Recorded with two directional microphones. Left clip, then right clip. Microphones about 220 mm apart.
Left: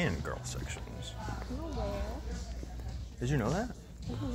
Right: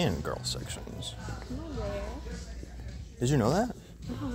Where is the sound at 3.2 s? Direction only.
50° right (ahead or behind).